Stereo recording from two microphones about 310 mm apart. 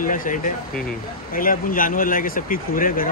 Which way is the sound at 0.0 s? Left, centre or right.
Left.